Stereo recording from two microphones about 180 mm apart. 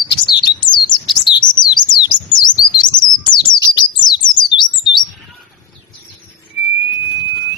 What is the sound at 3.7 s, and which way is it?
Bird, 25° left (ahead or behind).